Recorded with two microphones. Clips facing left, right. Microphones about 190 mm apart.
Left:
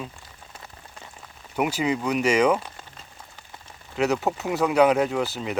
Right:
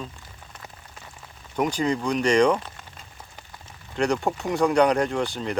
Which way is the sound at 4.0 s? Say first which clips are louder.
Even; 5° left (ahead or behind).